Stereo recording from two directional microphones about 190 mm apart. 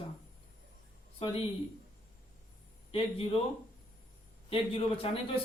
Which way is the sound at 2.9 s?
30° left (ahead or behind).